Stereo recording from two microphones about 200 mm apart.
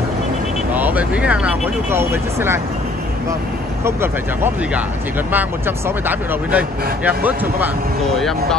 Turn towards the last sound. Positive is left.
turn(degrees=-10)  # may be behind; listen again after turning